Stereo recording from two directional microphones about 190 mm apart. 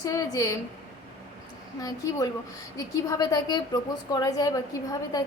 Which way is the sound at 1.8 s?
20° left (ahead or behind).